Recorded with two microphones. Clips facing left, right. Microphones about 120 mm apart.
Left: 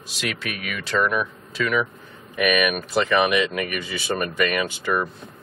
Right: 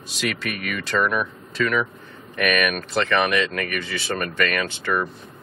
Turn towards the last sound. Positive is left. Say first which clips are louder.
# left 1 dB
turn(degrees=10)  # may be behind; listen again after turning